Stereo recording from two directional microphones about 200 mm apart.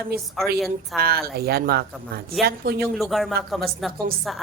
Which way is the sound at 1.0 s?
50° right (ahead or behind).